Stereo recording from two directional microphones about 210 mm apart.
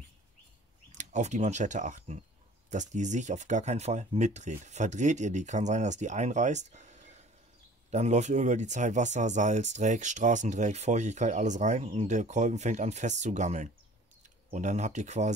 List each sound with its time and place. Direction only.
0.9 s speech: 35° right (ahead or behind)